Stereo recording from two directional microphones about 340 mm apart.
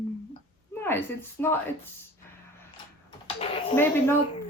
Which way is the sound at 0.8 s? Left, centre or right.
Centre.